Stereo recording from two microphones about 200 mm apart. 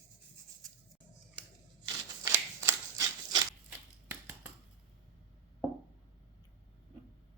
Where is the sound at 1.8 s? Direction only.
15° right (ahead or behind).